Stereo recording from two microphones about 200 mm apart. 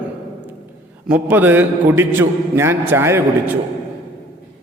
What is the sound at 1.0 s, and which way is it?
A man's voice, 10° right (ahead or behind).